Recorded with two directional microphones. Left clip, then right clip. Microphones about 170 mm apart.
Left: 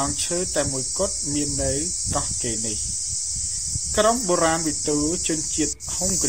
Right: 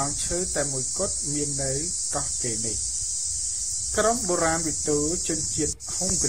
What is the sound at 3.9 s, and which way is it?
Cricket, 10° left (ahead or behind).